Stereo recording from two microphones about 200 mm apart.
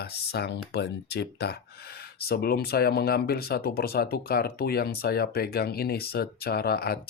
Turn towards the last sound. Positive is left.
turn(degrees=50)  # may be behind; listen again after turning